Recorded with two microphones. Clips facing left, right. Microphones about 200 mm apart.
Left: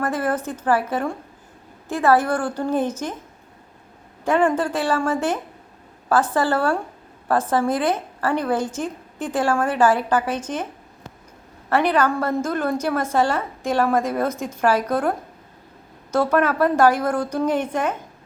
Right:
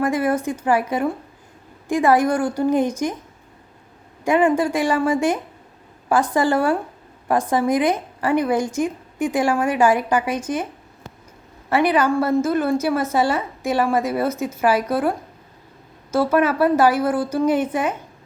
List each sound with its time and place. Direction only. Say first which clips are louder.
0.0 s a woman's voice: right 3 dB; 10° right (ahead or behind)
4.2 s a woman's voice: right 2 dB; 10° right (ahead or behind)
11.7 s a woman's voice: right 2 dB; 10° right (ahead or behind)
16.1 s a woman's voice: right 1 dB; 5° right (ahead or behind)